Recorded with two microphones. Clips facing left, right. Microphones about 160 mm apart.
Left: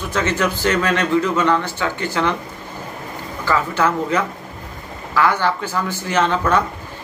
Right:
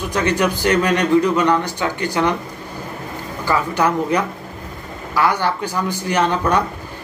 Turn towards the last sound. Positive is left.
turn(degrees=-15)  # may be behind; listen again after turning